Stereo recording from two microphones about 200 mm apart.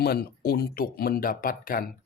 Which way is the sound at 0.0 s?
50° left (ahead or behind).